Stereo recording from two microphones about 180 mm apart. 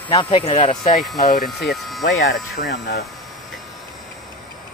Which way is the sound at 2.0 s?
90° left.